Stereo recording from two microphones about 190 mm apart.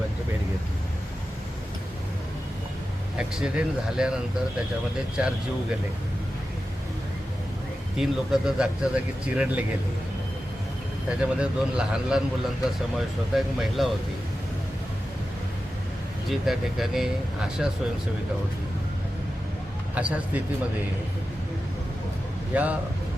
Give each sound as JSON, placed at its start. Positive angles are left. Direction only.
{"t": 3.2, "sound": "speech", "side_deg": -5}
{"t": 7.9, "sound": "speech", "side_deg": 0}
{"t": 11.2, "sound": "speech", "side_deg": -5}
{"t": 16.3, "sound": "speech", "side_deg": 0}
{"t": 20.0, "sound": "speech", "side_deg": -5}
{"t": 22.5, "sound": "speech", "side_deg": -5}